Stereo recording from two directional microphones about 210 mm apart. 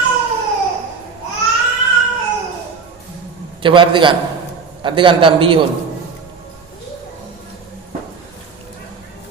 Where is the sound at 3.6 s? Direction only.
25° right (ahead or behind).